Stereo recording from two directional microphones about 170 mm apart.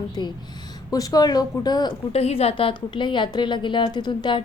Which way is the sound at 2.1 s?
35° left (ahead or behind).